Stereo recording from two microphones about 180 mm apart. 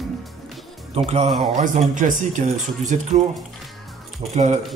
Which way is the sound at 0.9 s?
35° right (ahead or behind).